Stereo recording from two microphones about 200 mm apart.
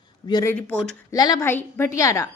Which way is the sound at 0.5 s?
5° left (ahead or behind).